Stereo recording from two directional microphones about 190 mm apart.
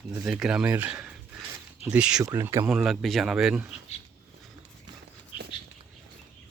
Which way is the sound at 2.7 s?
Centre (ahead or behind).